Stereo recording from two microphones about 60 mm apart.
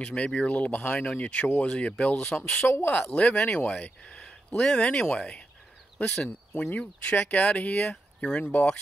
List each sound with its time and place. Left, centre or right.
0.0 s speech: centre
2.7 s speech: left
3.2 s speech: left
6.0 s speech: left
7.2 s speech: left
7.6 s speech: centre
8.4 s speech: left